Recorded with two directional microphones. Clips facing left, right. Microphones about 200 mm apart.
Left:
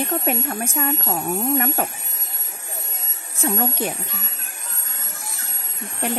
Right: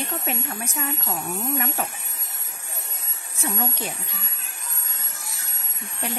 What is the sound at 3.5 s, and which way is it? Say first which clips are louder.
Speech: left 6 dB; 50° left (ahead or behind).